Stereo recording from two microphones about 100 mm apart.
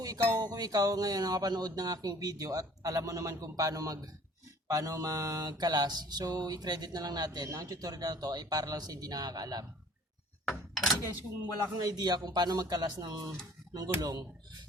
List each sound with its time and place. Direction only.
0.0 s mantra: 35° right (ahead or behind)
10.4 s a sound: centre (ahead or behind)
11.8 s mantra: 40° right (ahead or behind)